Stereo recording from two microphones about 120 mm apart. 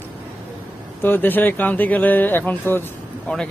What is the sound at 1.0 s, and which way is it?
Speech, 15° left (ahead or behind).